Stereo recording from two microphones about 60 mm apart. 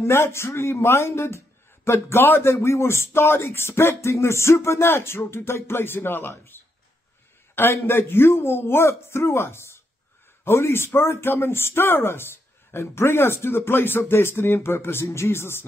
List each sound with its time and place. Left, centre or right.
0.0 s speech: left
2.5 s speech: left
7.8 s speech: left